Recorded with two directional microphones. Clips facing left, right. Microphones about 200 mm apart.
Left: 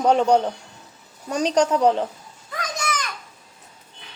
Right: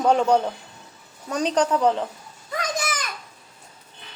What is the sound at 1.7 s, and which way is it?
Speech, 15° left (ahead or behind).